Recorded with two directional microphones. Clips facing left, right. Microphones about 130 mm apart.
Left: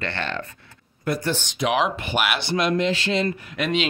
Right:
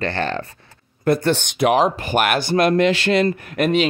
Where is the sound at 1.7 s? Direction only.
40° right (ahead or behind).